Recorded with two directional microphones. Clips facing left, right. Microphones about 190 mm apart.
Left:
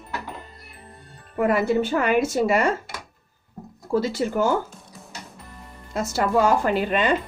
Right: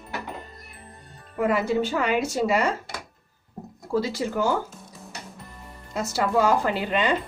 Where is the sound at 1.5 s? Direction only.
50° left (ahead or behind).